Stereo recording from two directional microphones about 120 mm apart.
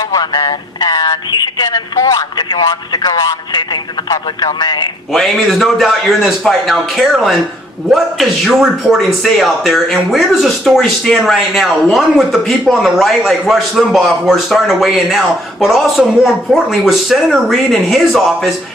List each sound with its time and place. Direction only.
0.0 s speech: 30° left (ahead or behind)
5.1 s speech: centre (ahead or behind)